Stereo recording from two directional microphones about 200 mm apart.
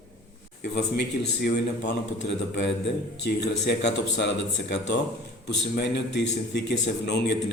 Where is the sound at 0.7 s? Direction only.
55° left (ahead or behind).